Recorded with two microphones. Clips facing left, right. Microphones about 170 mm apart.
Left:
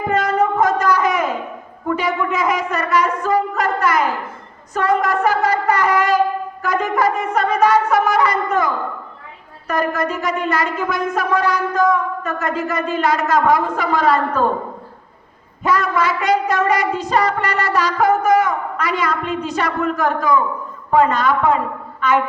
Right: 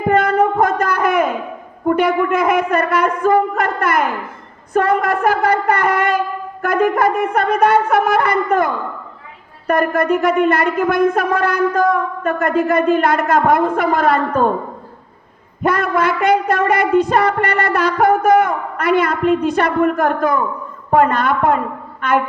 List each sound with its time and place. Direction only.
0.1 s a sound: 55° right (ahead or behind)
1.9 s shofar: 55° right (ahead or behind)
15.6 s shofar: 55° right (ahead or behind)